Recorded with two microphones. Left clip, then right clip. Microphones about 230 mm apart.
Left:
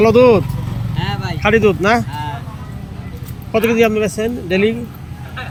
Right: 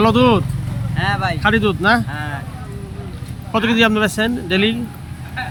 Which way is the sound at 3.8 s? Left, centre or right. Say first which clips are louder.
Left 1 dB; centre.